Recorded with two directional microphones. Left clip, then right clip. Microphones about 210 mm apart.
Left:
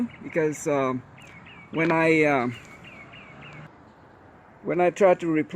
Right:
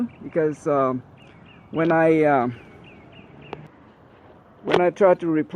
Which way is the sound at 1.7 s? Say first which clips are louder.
Right 3 dB; 5° left (ahead or behind).